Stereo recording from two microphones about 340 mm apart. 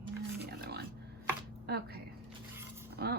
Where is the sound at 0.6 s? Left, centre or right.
Right.